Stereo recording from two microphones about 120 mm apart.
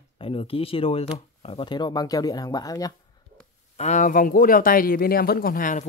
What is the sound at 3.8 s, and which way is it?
Speech, 85° left.